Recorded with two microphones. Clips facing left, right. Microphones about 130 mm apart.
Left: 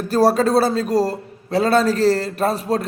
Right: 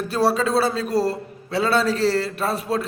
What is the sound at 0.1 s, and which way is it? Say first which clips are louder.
A man's voice: left 5 dB; 45° left (ahead or behind).